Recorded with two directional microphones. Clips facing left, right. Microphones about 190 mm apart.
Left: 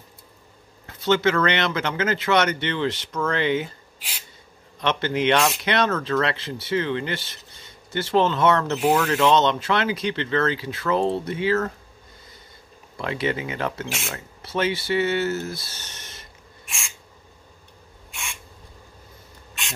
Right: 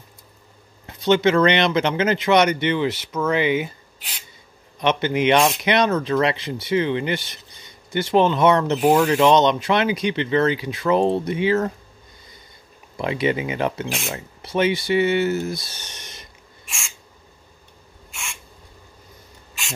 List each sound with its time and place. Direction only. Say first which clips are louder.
0.8 s speech: right 3 dB; 20° right (ahead or behind)
4.7 s speech: right 3 dB; 15° right (ahead or behind)
12.9 s speech: right 4 dB; 15° right (ahead or behind)
16.6 s owl: even; centre (ahead or behind)
18.1 s owl: even; centre (ahead or behind)